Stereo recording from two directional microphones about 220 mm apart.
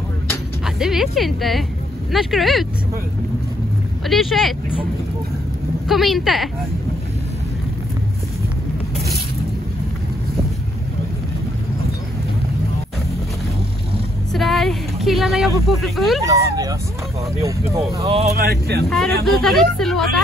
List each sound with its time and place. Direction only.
0.7 s speech: centre (ahead or behind)
4.1 s speech: centre (ahead or behind)
5.9 s speech: centre (ahead or behind)
14.3 s speech: centre (ahead or behind)
16.3 s speech: 15° right (ahead or behind)
18.0 s speech: 25° right (ahead or behind)
18.3 s speech: 45° right (ahead or behind)
18.9 s speech: centre (ahead or behind)